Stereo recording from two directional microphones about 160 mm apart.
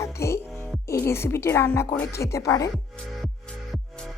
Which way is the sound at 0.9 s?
15° left (ahead or behind).